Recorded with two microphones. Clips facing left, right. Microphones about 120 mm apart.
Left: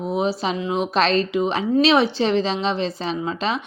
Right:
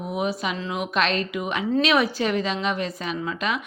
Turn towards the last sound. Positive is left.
turn(degrees=30)  # may be behind; listen again after turning